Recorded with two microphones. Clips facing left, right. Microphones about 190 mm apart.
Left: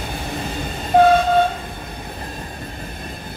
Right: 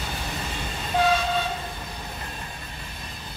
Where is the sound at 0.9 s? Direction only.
55° left (ahead or behind).